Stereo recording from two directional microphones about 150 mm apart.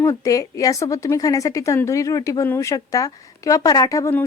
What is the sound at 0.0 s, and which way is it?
A woman's voice, 20° left (ahead or behind).